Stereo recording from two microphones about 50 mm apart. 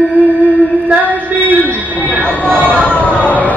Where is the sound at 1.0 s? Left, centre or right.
Right.